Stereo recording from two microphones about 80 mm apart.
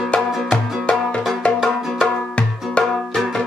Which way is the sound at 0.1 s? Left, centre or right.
Centre.